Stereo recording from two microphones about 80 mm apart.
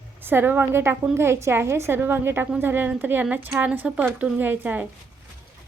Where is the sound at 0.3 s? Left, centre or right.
Right.